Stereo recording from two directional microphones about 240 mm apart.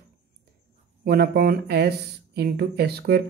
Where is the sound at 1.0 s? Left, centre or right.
Right.